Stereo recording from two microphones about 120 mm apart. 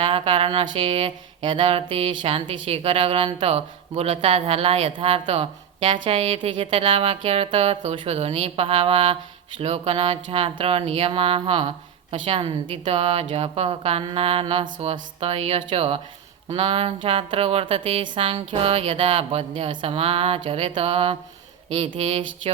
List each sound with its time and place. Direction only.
0.0 s music: 45° right (ahead or behind)
13.3 s speech: 55° right (ahead or behind)
14.0 s music: 45° right (ahead or behind)